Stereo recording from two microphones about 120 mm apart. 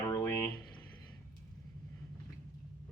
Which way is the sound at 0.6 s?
40° left (ahead or behind).